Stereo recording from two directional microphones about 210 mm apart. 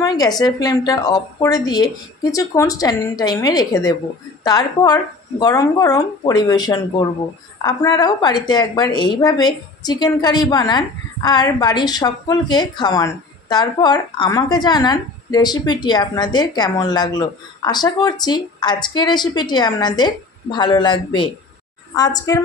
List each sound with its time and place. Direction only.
0.0 s a woman's voice: 20° left (ahead or behind)